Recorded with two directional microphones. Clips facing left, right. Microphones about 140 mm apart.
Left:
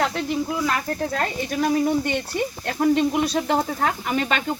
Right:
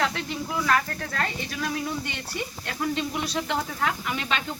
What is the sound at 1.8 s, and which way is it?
Speech, 55° left (ahead or behind).